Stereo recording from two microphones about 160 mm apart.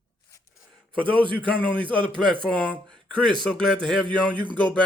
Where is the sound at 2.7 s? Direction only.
5° left (ahead or behind).